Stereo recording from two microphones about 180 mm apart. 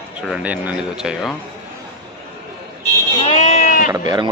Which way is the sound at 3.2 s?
35° left (ahead or behind).